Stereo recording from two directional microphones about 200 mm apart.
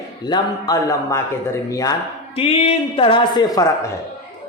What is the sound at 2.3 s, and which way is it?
Speech, 30° left (ahead or behind).